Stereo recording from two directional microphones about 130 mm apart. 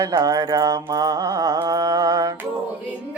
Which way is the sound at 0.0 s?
30° right (ahead or behind).